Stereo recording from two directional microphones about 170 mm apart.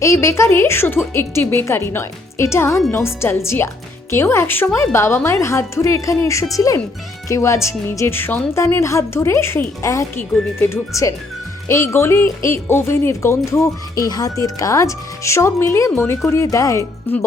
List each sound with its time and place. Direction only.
0.0 s speech: 15° left (ahead or behind)